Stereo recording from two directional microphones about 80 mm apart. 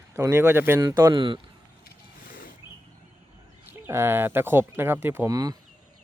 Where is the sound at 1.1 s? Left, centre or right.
Right.